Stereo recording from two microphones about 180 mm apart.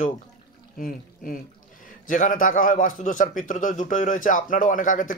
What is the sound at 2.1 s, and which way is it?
A man's voice, 45° left (ahead or behind).